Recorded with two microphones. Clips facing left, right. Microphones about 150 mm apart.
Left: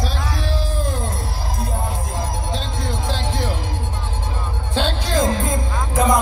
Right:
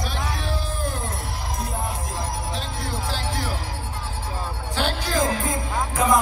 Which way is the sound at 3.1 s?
25° left (ahead or behind).